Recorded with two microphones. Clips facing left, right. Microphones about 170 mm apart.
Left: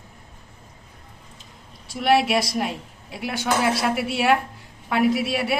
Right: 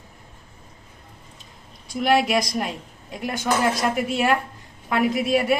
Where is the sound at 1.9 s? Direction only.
5° left (ahead or behind).